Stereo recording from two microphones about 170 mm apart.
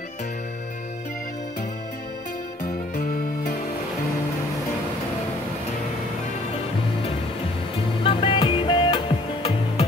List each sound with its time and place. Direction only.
3.0 s music: 50° left (ahead or behind)
8.0 s music: 30° left (ahead or behind)